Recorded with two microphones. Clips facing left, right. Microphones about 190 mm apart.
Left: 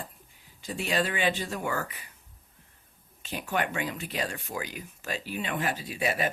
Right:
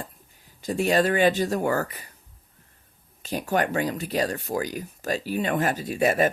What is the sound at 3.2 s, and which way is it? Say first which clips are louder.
Speech: right 6 dB; 40° right (ahead or behind).